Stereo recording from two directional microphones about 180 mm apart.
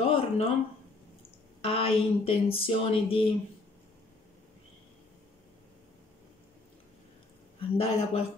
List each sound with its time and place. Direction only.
0.0 s a sound: 30° left (ahead or behind)
1.6 s speech: 30° left (ahead or behind)
7.7 s speech: 35° left (ahead or behind)